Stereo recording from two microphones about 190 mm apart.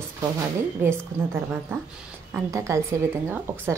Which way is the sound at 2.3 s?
15° right (ahead or behind).